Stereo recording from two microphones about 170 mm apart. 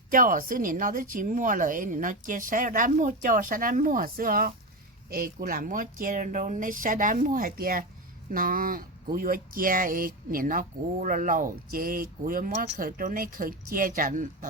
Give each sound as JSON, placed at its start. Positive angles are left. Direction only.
{"t": 0.1, "sound": "speech", "side_deg": -55}